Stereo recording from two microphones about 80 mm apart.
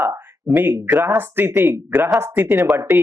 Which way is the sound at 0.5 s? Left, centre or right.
Right.